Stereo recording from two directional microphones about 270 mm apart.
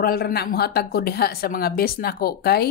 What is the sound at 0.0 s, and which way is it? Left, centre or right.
A woman's voice, left.